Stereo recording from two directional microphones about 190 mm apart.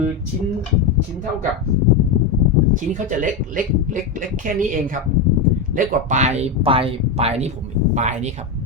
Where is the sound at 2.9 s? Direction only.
45° right (ahead or behind).